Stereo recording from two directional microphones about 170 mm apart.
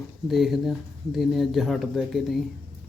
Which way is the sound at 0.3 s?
Centre (ahead or behind).